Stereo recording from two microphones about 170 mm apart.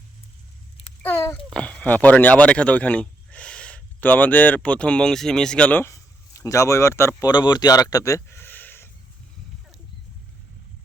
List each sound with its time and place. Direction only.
1.0 s a child's voice: 15° left (ahead or behind)